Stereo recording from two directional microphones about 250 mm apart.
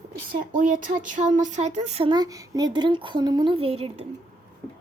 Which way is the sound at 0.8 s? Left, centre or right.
Right.